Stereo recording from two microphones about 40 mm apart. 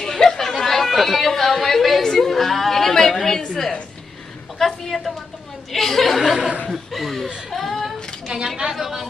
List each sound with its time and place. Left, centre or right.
0.0 s chatter: centre
3.3 s a sound: centre
4.6 s a woman's voice: centre
7.4 s child singing: centre
8.3 s a woman's voice: centre
8.7 s speech: centre